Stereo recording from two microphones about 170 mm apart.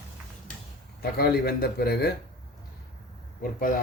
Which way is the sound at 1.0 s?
65° left (ahead or behind).